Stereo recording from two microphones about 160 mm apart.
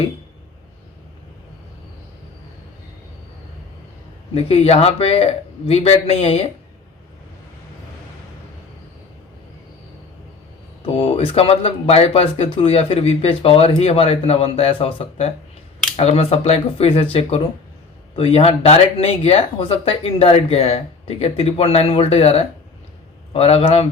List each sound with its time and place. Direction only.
4.4 s speech: 40° left (ahead or behind)
11.3 s speech: 35° left (ahead or behind)